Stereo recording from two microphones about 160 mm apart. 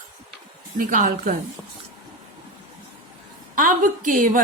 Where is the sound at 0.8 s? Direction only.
55° right (ahead or behind).